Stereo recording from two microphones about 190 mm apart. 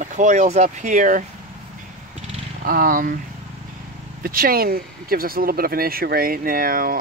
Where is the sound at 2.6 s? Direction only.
50° right (ahead or behind).